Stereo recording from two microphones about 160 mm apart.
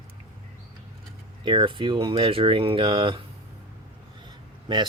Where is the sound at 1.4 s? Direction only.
30° right (ahead or behind).